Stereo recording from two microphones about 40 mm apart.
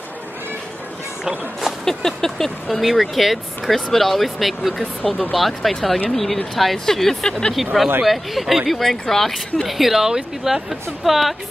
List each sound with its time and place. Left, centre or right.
1.9 s vehicle: centre
2.8 s speech: centre
7.2 s speech: centre
8.0 s speech: centre
9.0 s vehicle: centre
9.7 s speech: centre